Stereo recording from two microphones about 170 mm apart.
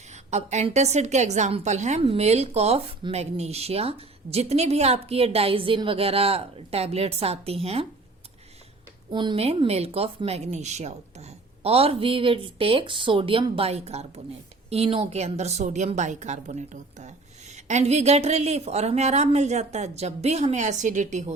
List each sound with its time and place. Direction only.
0.3 s a woman's voice: 40° right (ahead or behind)
9.0 s a woman's voice: 30° right (ahead or behind)